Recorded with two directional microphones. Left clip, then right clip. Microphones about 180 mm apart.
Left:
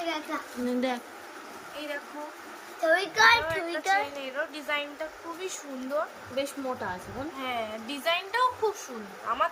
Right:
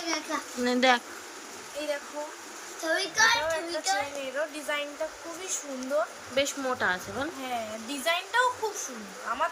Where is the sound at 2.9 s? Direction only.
30° left (ahead or behind).